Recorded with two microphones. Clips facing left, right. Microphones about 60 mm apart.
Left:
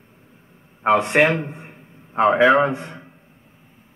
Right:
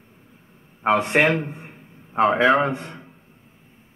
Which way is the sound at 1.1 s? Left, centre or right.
Centre.